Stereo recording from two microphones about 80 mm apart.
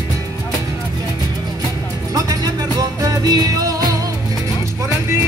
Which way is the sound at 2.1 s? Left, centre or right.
Right.